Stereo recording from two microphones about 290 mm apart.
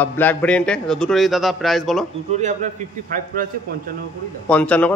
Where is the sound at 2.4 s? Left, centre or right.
Right.